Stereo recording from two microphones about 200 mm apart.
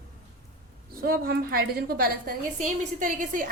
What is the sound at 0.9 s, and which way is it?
A woman's voice, 50° right (ahead or behind).